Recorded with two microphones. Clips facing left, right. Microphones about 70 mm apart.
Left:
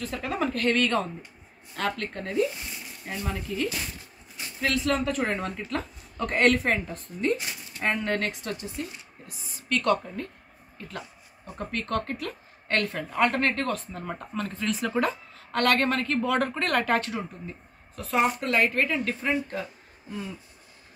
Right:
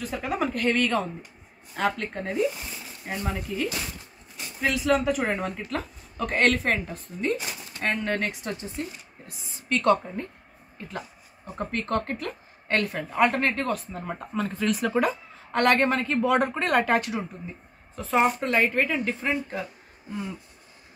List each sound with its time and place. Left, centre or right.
0.0 s speech: centre
1.8 s a woman's voice: centre
8.5 s a woman's voice: right
11.4 s a woman's voice: right
12.6 s speech: centre
17.9 s a woman's voice: right